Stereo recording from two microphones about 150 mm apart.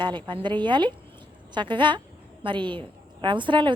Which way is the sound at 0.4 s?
30° right (ahead or behind).